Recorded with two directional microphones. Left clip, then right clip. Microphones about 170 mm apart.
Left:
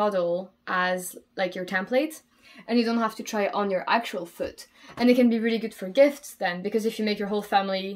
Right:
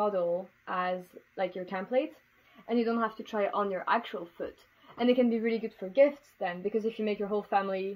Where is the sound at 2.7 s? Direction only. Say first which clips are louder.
Left 4 dB; 15° left (ahead or behind).